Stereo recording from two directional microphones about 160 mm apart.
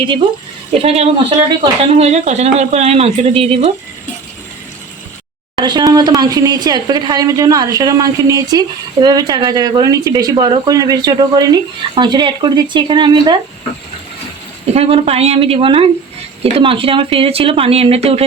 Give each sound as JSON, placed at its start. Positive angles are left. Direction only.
{"t": 0.7, "sound": "speech", "side_deg": -40}
{"t": 5.5, "sound": "speech", "side_deg": -25}
{"t": 14.7, "sound": "speech", "side_deg": -40}